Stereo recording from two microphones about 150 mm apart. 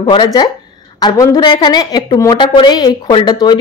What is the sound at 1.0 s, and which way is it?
Speech, 20° left (ahead or behind).